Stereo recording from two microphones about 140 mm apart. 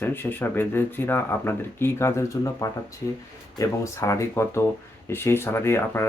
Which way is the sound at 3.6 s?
20° left (ahead or behind).